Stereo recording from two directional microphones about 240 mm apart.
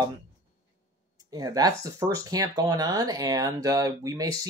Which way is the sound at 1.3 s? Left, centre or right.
Centre.